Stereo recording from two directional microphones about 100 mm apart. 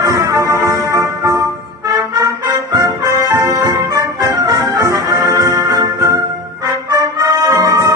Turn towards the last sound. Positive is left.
turn(degrees=-30)  # may be behind; listen again after turning